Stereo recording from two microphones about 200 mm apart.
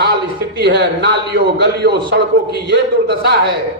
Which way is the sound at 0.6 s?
55° right (ahead or behind).